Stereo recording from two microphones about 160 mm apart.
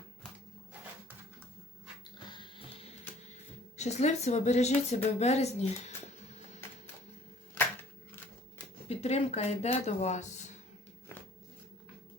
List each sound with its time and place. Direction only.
2.3 s music: 30° left (ahead or behind)
3.8 s speech: 45° left (ahead or behind)
8.9 s speech: 40° left (ahead or behind)
11.1 s a sound: 15° left (ahead or behind)